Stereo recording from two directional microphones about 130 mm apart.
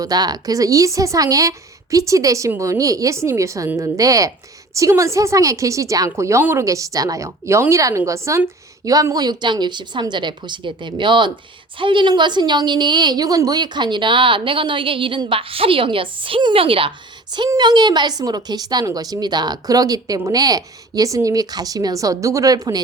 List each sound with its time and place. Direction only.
0.0 s a woman's voice: 30° right (ahead or behind)
17.5 s a woman's voice: 35° right (ahead or behind)